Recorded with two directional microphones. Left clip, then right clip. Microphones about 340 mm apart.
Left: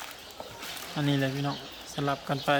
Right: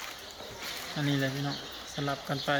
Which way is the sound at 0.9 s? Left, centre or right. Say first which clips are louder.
Left 3 dB; centre.